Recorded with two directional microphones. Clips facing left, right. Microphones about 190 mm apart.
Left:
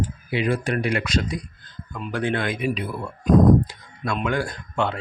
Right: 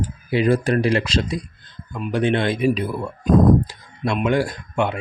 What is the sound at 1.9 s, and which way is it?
Speech, 15° right (ahead or behind).